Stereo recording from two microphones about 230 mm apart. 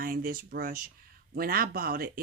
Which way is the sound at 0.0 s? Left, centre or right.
Right.